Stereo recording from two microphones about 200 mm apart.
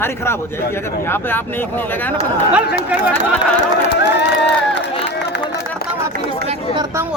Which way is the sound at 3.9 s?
60° left (ahead or behind).